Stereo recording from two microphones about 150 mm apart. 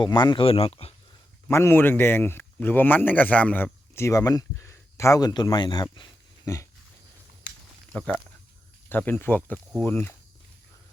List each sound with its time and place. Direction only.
0.0 s speech: 30° left (ahead or behind)
1.5 s speech: 15° left (ahead or behind)
7.9 s speech: 10° left (ahead or behind)